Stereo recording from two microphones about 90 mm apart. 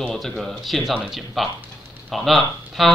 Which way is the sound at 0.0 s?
5° left (ahead or behind).